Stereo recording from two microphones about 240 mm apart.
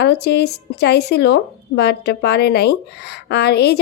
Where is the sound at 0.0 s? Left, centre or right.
Left.